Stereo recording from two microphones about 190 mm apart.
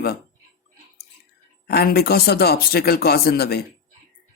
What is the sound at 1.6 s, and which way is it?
Speech, 55° left (ahead or behind).